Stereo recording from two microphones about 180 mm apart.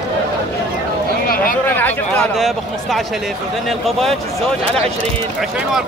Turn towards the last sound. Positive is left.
turn(degrees=0)  # may be behind; listen again after turning